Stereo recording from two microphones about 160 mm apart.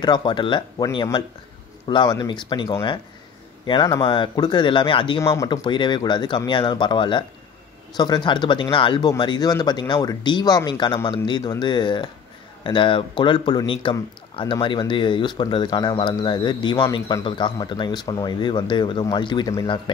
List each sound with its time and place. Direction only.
0.0 s speech: 30° left (ahead or behind)
1.9 s speech: 25° left (ahead or behind)